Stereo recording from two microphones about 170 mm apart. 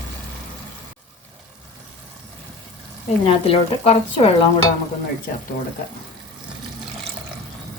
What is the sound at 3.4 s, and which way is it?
Speech, 35° left (ahead or behind).